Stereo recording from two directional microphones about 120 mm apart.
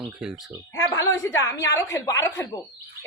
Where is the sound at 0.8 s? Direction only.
30° left (ahead or behind).